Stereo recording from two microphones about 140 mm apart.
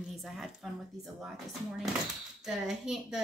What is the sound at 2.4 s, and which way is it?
Speech, 5° right (ahead or behind).